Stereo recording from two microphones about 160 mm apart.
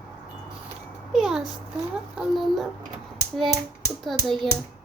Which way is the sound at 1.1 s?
5° right (ahead or behind).